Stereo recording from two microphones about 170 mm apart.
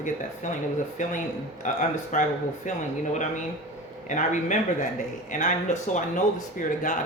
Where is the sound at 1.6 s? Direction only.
45° left (ahead or behind).